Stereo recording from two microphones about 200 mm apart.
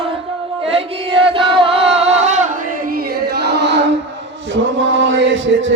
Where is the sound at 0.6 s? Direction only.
30° right (ahead or behind); by 5.7 s 70° right (ahead or behind).